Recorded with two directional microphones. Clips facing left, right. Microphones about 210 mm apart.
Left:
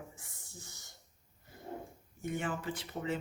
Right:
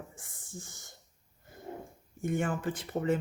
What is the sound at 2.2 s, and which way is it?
Speech, 50° right (ahead or behind).